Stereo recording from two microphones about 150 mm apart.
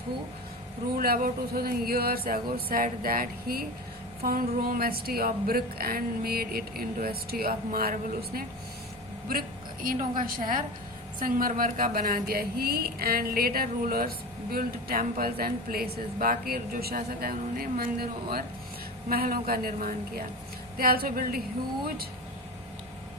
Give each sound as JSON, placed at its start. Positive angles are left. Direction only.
{"t": 0.9, "sound": "speech", "side_deg": -80}
{"t": 9.8, "sound": "speech", "side_deg": -65}